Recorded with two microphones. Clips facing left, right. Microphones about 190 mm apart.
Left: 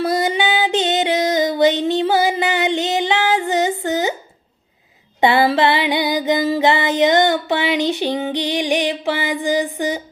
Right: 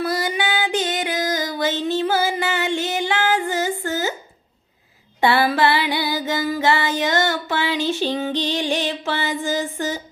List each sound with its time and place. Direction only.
0.0 s child singing: 25° left (ahead or behind)
3.8 s a sound: 20° left (ahead or behind)
5.2 s music: 20° left (ahead or behind)